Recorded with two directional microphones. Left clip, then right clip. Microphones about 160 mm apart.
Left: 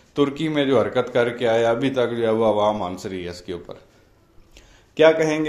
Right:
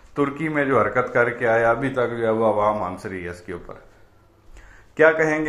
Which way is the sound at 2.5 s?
55° left (ahead or behind).